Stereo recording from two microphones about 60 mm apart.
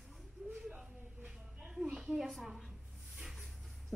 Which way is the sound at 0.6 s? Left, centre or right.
Centre.